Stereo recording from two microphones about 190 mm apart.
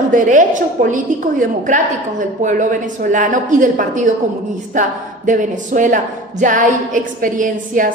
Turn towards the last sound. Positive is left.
turn(degrees=-45)  # may be behind; listen again after turning